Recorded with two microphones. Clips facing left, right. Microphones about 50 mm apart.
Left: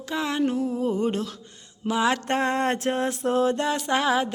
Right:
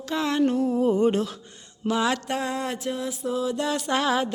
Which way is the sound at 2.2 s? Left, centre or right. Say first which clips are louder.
Left 4 dB; left.